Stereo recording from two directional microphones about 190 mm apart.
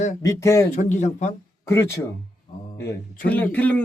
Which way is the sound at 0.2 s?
15° left (ahead or behind).